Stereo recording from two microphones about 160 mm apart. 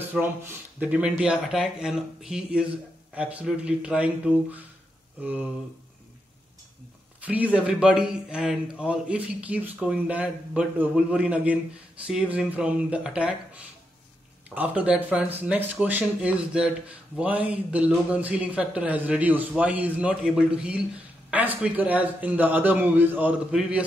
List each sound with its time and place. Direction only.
0.1 s speech: 15° right (ahead or behind)
7.2 s speech: 10° right (ahead or behind)